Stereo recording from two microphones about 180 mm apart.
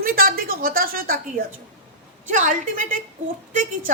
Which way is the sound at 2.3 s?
45° right (ahead or behind).